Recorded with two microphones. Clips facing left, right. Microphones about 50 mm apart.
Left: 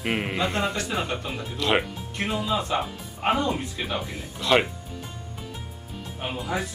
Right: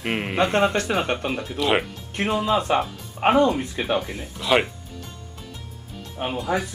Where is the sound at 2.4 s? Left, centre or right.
Right.